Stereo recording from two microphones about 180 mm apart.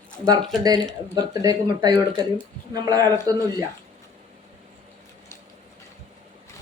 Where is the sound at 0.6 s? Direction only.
20° right (ahead or behind).